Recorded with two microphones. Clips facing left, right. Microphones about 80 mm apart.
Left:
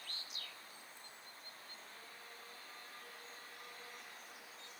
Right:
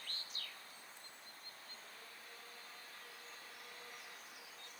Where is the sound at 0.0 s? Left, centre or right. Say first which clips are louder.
Even; right.